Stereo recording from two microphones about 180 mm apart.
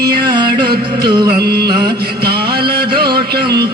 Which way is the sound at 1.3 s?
60° right (ahead or behind).